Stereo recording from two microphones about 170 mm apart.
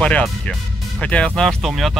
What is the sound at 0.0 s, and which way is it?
Speech, 5° left (ahead or behind).